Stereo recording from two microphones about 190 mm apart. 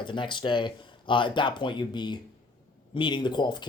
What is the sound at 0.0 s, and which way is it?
Speech, 25° left (ahead or behind).